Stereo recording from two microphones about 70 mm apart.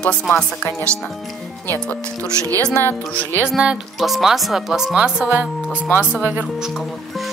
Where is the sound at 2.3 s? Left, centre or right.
Right.